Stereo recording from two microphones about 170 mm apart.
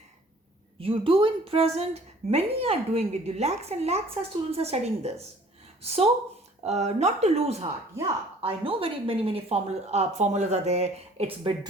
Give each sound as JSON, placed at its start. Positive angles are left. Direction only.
{"t": 0.8, "sound": "a woman's voice", "side_deg": -30}